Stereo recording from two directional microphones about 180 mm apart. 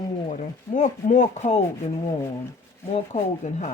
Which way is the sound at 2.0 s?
15° left (ahead or behind).